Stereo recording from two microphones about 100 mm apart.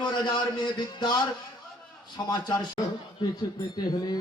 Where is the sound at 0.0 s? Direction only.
50° left (ahead or behind).